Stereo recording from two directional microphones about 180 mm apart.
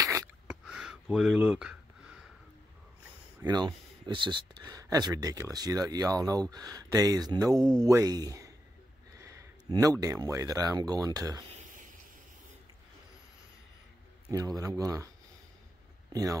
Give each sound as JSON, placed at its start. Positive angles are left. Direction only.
{"t": 0.0, "sound": "a sound", "side_deg": -15}
{"t": 0.7, "sound": "speech", "side_deg": 0}
{"t": 3.4, "sound": "speech", "side_deg": -25}
{"t": 14.3, "sound": "speech", "side_deg": -20}
{"t": 16.1, "sound": "speech", "side_deg": -20}